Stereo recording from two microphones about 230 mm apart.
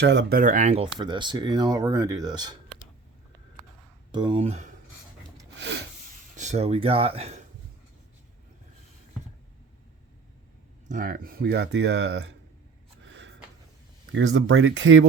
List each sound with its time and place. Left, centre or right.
0.0 s speech: right
0.9 s speech: centre
4.1 s speech: right
5.5 s rub: right
6.3 s speech: right
10.8 s speech: right
14.1 s speech: right